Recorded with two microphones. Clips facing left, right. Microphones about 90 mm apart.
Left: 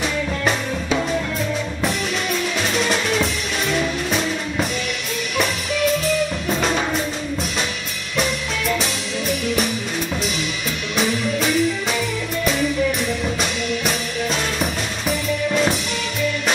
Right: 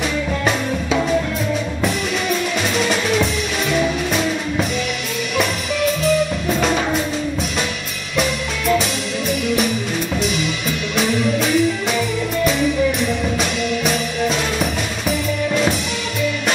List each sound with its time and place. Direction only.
0.5 s music: centre (ahead or behind)
2.7 s music: centre (ahead or behind)
6.6 s music: centre (ahead or behind)
8.2 s music: centre (ahead or behind)
11.0 s music: centre (ahead or behind)